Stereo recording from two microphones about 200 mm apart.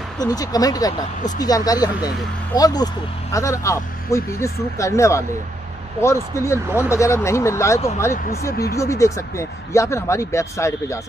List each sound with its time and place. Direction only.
0.2 s speech: 20° left (ahead or behind)